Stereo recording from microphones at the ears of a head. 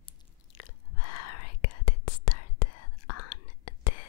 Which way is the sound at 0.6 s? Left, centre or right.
Left.